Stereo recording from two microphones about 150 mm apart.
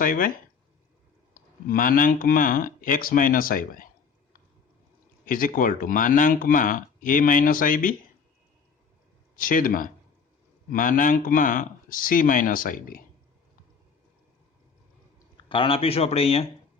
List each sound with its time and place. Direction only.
0.0 s speech: 65° left (ahead or behind)
1.3 s speech: 70° left (ahead or behind)
5.2 s speech: 65° left (ahead or behind)
9.3 s speech: 65° left (ahead or behind)
15.4 s speech: 35° left (ahead or behind)